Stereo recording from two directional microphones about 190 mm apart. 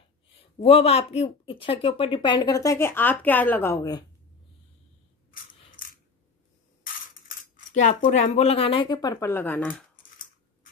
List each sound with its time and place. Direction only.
0.6 s speech: 30° left (ahead or behind)
5.8 s coin: 45° left (ahead or behind)
7.2 s speech: 40° left (ahead or behind); by 9.8 s 10° left (ahead or behind)